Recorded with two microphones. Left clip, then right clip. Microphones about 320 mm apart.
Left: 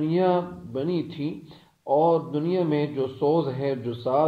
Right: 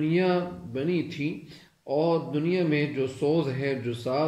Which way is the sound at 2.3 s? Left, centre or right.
Left.